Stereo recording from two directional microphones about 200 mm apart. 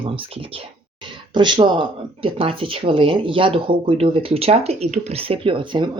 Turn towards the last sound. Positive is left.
turn(degrees=-25)  # may be behind; listen again after turning